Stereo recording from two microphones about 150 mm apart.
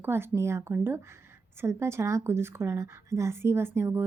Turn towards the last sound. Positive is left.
turn(degrees=-15)  # may be behind; listen again after turning